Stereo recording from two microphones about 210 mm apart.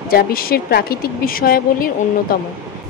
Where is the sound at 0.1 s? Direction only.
45° left (ahead or behind).